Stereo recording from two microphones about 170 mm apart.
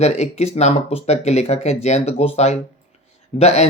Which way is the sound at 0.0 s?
40° left (ahead or behind).